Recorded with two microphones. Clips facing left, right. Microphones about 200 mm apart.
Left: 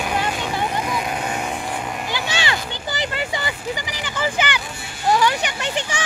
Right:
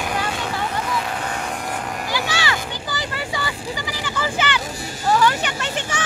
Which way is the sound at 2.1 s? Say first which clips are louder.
Right 1 dB; 20° left (ahead or behind).